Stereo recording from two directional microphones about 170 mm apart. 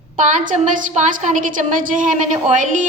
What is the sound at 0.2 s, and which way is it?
A woman's voice, 50° right (ahead or behind).